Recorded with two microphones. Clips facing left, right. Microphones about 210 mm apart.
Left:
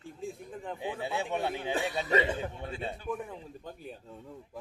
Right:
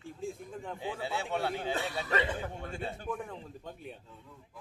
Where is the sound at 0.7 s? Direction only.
20° left (ahead or behind).